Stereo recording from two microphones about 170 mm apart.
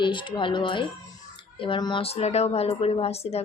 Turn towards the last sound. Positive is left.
turn(degrees=35)  # may be behind; listen again after turning